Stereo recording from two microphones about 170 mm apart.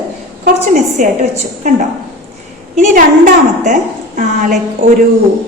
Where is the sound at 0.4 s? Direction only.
45° right (ahead or behind).